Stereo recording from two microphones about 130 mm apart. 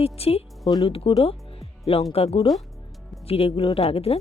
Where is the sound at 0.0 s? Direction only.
50° left (ahead or behind).